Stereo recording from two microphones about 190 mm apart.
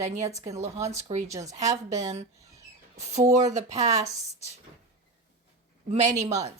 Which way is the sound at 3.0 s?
35° right (ahead or behind).